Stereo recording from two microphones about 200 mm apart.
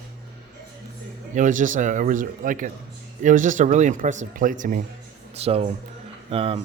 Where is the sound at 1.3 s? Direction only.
40° right (ahead or behind).